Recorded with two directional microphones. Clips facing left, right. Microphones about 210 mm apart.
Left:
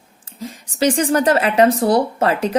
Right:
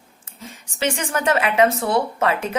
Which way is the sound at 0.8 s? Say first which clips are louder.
Left 7 dB; 35° left (ahead or behind).